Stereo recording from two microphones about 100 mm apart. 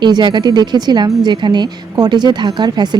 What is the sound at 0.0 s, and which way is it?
Speech, 50° right (ahead or behind).